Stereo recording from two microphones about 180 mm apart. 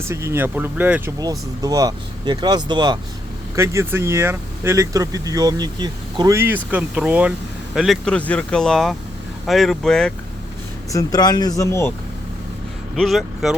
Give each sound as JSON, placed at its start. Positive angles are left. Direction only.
{"t": 0.0, "sound": "speech", "side_deg": -15}
{"t": 1.2, "sound": "speech", "side_deg": -20}
{"t": 10.9, "sound": "speech", "side_deg": 20}
{"t": 13.0, "sound": "speech", "side_deg": 0}